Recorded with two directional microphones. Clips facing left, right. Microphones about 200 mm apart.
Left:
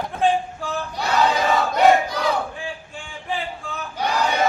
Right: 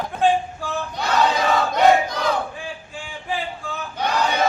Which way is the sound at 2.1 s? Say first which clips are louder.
Even; centre (ahead or behind).